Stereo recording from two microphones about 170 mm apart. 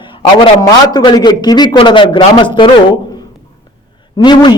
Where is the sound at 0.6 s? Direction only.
25° left (ahead or behind).